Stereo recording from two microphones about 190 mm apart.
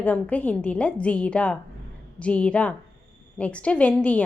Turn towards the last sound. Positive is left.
turn(degrees=5)  # may be behind; listen again after turning